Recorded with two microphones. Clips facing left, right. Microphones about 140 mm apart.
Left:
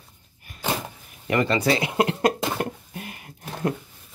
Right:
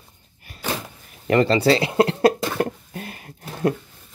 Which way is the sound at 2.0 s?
35° right (ahead or behind).